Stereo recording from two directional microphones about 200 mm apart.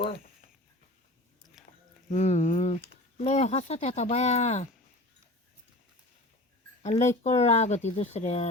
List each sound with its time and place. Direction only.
2.0 s speech: 35° left (ahead or behind)
6.8 s speech: 35° left (ahead or behind)